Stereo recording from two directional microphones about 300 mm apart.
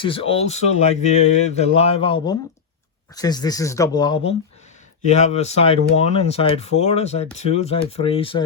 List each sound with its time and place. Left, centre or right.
0.0 s speech: centre